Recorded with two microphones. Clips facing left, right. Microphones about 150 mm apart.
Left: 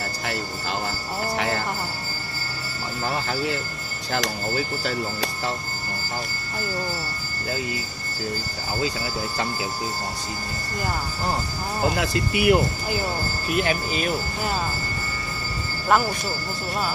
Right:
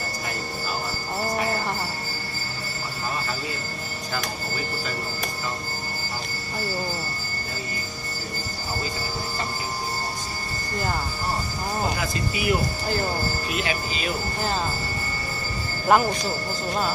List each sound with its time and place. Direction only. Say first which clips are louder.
1.3 s jingle bell: left 1 dB; 75° left (ahead or behind)
4.1 s speech: left 6 dB; 75° left (ahead or behind)
12.0 s speech: left 4 dB; 70° left (ahead or behind)
13.6 s speech: left 4 dB; 50° left (ahead or behind)
15.9 s speech: right 1 dB; 5° right (ahead or behind)